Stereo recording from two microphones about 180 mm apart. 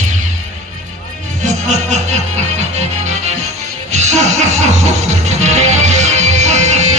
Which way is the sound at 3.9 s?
40° right (ahead or behind).